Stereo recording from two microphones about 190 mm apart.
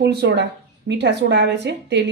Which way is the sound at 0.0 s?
60° right (ahead or behind).